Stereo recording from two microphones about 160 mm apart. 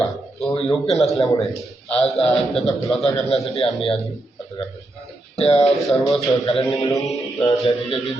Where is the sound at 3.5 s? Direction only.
40° left (ahead or behind).